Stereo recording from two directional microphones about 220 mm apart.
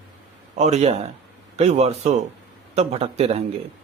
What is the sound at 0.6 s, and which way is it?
A man's voice, 30° right (ahead or behind).